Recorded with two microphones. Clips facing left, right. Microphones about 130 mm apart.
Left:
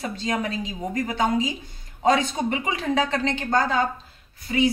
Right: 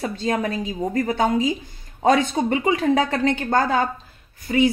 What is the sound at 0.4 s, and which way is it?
Speech, 45° right (ahead or behind).